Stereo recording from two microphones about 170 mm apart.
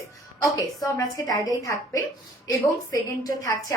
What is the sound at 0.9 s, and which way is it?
A woman's voice, 20° left (ahead or behind).